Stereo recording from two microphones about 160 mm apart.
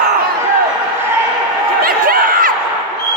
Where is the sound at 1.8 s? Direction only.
65° right (ahead or behind).